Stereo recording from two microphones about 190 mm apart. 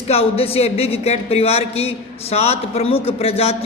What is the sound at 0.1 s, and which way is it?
A man's voice, 30° left (ahead or behind).